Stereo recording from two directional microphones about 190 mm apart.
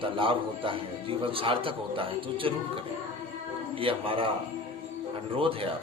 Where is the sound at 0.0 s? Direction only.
25° right (ahead or behind).